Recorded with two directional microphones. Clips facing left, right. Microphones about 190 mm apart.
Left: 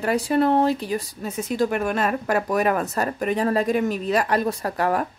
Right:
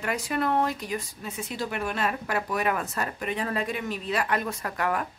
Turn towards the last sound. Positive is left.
turn(degrees=35)  # may be behind; listen again after turning